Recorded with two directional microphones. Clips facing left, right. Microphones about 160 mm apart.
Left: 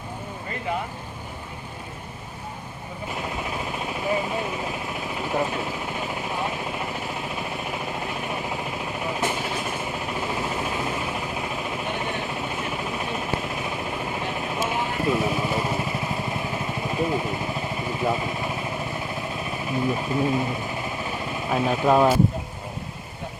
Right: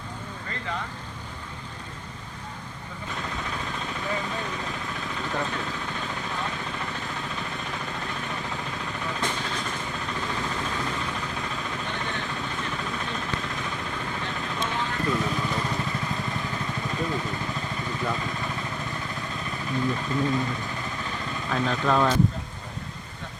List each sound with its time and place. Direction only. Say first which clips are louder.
0.5 s speech: left 5 dB; 15° left (ahead or behind)
3.1 s machine gun: left 3 dB; 15° left (ahead or behind)